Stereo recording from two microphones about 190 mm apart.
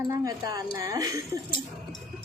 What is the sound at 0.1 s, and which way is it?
A woman's voice, 20° right (ahead or behind).